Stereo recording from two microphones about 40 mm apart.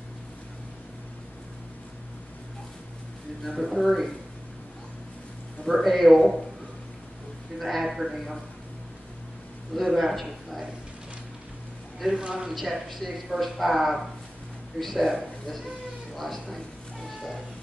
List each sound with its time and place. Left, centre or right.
3.4 s a woman's voice: centre
5.7 s a woman's voice: centre
7.5 s a woman's voice: centre
9.8 s a woman's voice: centre
12.1 s speech: centre
12.4 s a woman's voice: centre
17.1 s a sound: centre